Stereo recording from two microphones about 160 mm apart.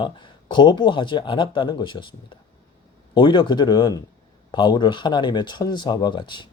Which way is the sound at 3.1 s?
30° left (ahead or behind).